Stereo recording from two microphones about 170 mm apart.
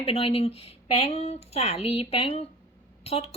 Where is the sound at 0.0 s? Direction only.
35° left (ahead or behind).